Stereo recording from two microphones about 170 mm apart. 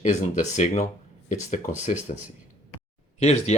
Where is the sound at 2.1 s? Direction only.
40° left (ahead or behind).